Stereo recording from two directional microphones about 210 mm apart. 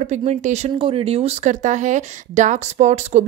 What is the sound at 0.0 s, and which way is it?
Speech, 30° right (ahead or behind).